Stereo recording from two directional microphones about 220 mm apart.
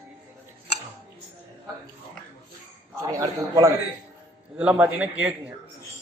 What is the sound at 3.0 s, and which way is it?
A man's voice, 15° right (ahead or behind).